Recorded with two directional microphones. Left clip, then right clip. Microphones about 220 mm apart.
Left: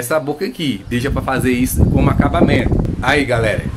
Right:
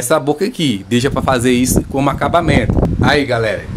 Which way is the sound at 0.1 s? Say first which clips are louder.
Right 4 dB; 45° right (ahead or behind).